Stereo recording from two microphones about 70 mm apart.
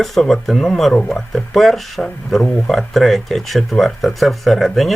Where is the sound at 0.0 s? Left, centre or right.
Centre.